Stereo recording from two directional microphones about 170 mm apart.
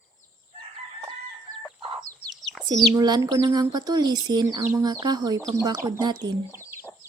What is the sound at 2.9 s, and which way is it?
Speech, 25° right (ahead or behind).